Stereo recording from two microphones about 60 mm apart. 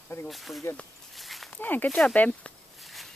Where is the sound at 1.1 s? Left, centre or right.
Centre.